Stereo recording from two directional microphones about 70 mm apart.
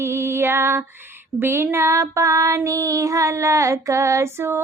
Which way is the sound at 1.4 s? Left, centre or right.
Right.